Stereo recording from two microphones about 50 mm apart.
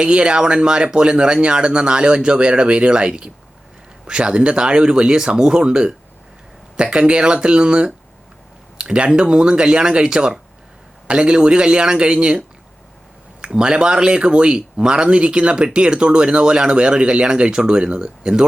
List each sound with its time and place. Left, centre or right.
0.0 s speech: right
13.4 s speech: centre